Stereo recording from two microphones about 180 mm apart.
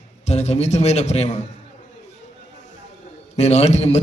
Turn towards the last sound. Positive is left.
turn(degrees=35)  # may be behind; listen again after turning